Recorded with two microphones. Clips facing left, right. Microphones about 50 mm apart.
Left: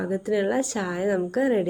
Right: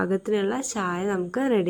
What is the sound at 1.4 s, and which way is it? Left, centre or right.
Speech, right.